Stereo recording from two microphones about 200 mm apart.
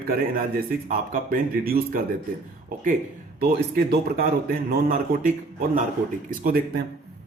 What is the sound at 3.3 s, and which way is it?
A man's voice, 50° right (ahead or behind).